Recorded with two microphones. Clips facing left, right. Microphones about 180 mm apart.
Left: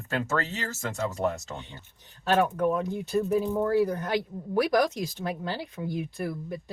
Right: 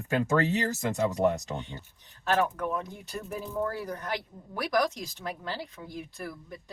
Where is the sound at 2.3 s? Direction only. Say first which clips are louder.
Left 4 dB; 30° left (ahead or behind).